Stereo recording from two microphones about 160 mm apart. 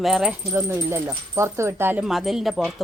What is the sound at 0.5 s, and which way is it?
Speech, 15° right (ahead or behind).